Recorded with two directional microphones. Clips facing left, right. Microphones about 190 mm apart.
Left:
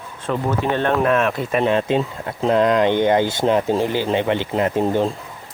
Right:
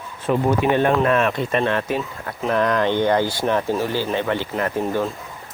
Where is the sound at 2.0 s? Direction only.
25° left (ahead or behind).